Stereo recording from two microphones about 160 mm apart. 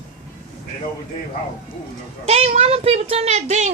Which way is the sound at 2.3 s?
40° right (ahead or behind).